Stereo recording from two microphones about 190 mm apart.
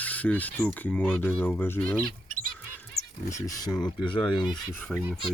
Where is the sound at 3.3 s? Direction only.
20° left (ahead or behind).